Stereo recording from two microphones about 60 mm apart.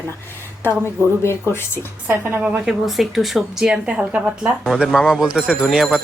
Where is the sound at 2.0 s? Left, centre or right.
Right.